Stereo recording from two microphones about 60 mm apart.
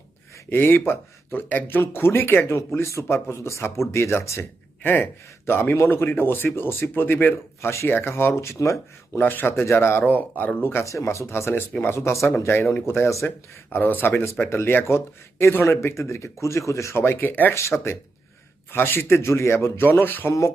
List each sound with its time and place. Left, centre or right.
0.5 s speech: left
2.5 s speech: left
4.8 s speech: left
9.1 s speech: left
10.1 s speech: left
10.8 s speech: left
12.9 s speech: left
13.7 s speech: left
17.0 s speech: left
17.5 s speech: left
18.7 s speech: left